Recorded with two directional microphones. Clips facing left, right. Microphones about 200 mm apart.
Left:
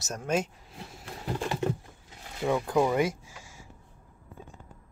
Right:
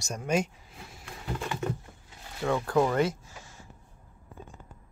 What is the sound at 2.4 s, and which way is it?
Speech, 10° left (ahead or behind).